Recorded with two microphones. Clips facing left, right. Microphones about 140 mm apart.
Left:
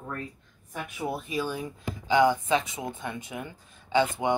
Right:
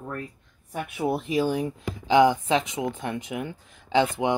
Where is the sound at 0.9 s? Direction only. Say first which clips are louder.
Right 6 dB; 80° right.